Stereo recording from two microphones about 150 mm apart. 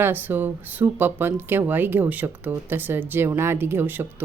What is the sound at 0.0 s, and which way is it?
Speech, 15° right (ahead or behind).